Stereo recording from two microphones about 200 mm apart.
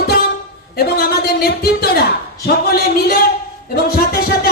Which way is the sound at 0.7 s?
50° left (ahead or behind).